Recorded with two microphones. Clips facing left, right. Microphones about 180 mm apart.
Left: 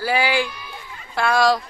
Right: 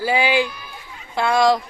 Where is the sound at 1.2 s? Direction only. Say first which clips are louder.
Right 1 dB; 20° right (ahead or behind).